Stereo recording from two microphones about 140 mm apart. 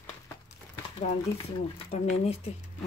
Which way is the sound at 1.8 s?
45° left (ahead or behind).